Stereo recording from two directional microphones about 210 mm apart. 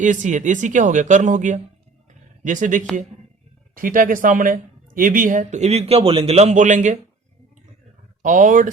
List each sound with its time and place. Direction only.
0.0 s speech: 35° right (ahead or behind)
8.2 s speech: 40° right (ahead or behind)